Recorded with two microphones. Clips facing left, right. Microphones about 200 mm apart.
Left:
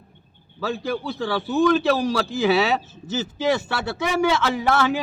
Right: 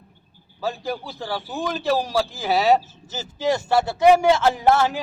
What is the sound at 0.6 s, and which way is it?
A man's voice, 75° left (ahead or behind).